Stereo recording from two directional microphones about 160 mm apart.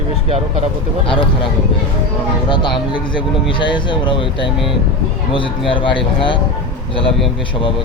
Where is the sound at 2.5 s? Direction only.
30° left (ahead or behind).